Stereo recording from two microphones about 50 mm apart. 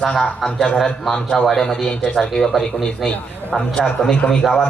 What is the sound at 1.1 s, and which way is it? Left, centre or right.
A man's voice, centre.